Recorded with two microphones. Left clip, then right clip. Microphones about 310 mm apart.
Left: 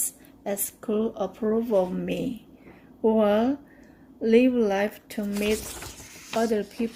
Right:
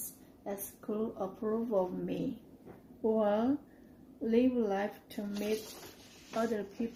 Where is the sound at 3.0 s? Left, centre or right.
Left.